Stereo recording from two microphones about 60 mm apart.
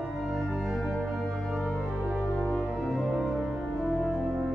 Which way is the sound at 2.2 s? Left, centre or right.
Left.